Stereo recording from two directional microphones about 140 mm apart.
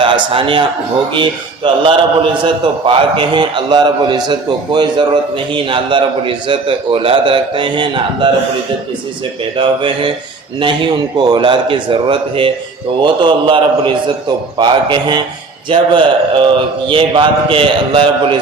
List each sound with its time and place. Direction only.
0.0 s a man's voice: 35° right (ahead or behind)
9.6 s a man's voice: 40° right (ahead or behind)